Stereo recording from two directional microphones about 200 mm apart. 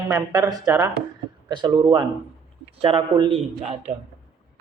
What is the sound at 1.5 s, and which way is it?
A man's voice, 20° right (ahead or behind).